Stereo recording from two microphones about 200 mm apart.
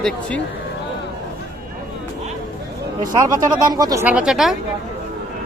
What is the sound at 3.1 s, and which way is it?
Speech, 20° right (ahead or behind).